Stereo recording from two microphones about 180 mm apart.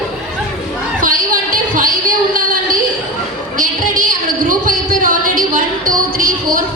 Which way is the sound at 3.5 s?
50° right (ahead or behind).